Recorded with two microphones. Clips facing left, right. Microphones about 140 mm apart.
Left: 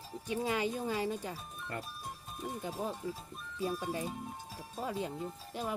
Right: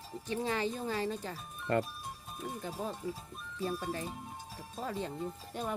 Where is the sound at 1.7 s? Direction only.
75° right (ahead or behind).